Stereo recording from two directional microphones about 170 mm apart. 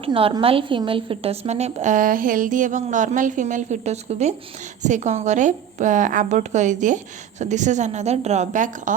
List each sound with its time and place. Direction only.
0.0 s a woman's voice: 35° right (ahead or behind)